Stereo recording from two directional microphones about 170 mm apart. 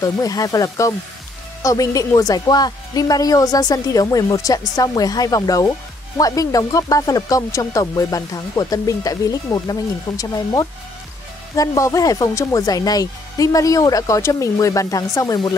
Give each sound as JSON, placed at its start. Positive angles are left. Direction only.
{"t": 0.0, "sound": "speech", "side_deg": 20}